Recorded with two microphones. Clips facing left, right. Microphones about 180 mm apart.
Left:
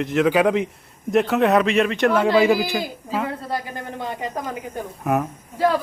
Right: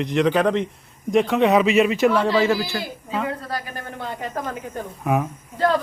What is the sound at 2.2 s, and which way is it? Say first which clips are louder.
A woman's voice: left 2 dB; 15° left (ahead or behind).